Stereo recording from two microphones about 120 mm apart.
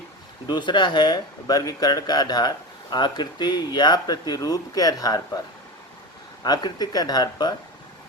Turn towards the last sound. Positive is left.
turn(degrees=35)  # may be behind; listen again after turning